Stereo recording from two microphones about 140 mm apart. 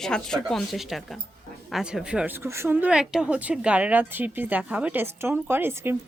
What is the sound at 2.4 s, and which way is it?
A woman's voice, 20° right (ahead or behind).